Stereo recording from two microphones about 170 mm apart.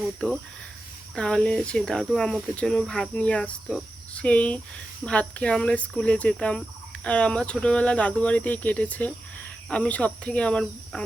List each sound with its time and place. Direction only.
0.2 s speech: 5° left (ahead or behind)